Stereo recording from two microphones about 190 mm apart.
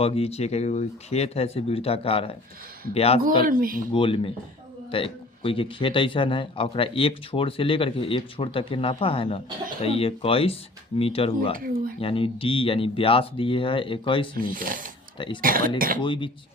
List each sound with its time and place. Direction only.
0.0 s speech: 30° left (ahead or behind)
3.4 s speech: 50° right (ahead or behind)
3.9 s a man's voice: 25° left (ahead or behind)
11.5 s speech: 50° right (ahead or behind)
11.9 s a man's voice: 30° left (ahead or behind)
14.3 s speech: 45° right (ahead or behind)
16.0 s a man's voice: 25° left (ahead or behind)